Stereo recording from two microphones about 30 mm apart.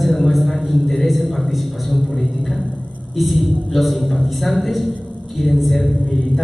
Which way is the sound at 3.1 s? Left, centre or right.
Centre.